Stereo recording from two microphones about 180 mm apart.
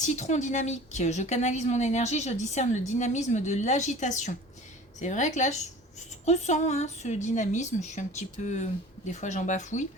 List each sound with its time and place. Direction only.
0.0 s a woman's voice: 40° left (ahead or behind)